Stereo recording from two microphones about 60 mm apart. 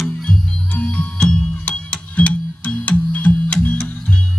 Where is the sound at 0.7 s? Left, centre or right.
Left.